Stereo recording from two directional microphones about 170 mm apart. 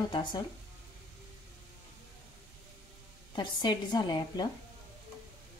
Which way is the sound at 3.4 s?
25° left (ahead or behind).